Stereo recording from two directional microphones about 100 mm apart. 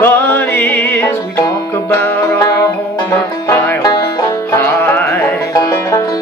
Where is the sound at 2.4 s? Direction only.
40° left (ahead or behind).